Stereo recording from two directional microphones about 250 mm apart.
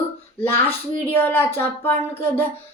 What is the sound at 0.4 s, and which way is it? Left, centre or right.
A woman's voice, centre.